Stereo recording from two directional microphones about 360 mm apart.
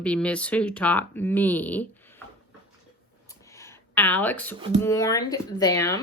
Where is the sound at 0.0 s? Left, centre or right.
Centre.